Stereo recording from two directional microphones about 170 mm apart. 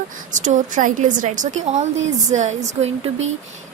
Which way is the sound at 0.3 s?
45° right (ahead or behind).